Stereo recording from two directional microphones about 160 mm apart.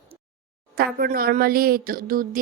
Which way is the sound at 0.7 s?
65° right (ahead or behind).